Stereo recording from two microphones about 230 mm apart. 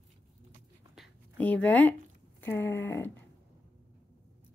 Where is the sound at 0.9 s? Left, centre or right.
Centre.